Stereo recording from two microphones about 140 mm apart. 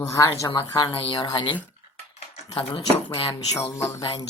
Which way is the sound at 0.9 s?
35° left (ahead or behind).